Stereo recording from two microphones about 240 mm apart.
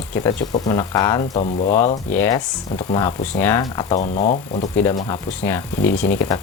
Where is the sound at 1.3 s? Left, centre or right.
Left.